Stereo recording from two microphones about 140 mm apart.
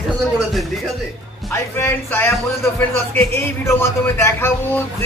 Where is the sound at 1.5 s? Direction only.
15° left (ahead or behind).